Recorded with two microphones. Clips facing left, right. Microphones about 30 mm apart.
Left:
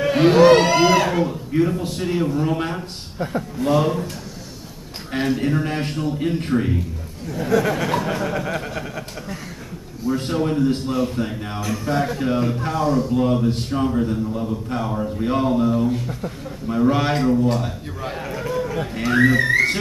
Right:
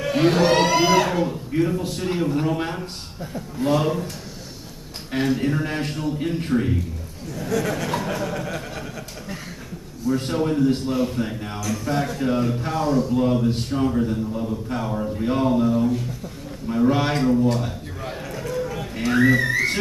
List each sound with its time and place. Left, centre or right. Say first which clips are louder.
0.0 s a man's voice: left 5 dB; centre
5.1 s a man's voice: left 1 dB; centre
7.2 s a man's voice: left 5 dB; left
10.1 s a man's voice: left 1 dB; centre